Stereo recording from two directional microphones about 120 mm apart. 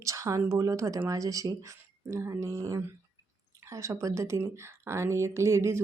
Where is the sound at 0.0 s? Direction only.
25° right (ahead or behind).